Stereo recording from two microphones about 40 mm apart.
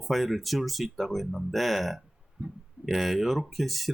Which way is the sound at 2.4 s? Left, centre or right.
Right.